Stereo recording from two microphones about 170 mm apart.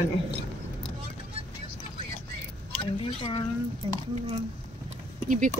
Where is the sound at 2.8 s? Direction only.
30° left (ahead or behind).